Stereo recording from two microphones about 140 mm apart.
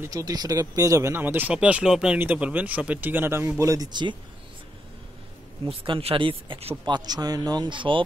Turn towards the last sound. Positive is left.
turn(degrees=-35)  # may be behind; listen again after turning